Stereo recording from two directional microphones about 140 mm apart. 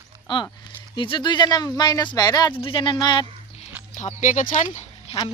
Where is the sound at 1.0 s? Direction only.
35° left (ahead or behind).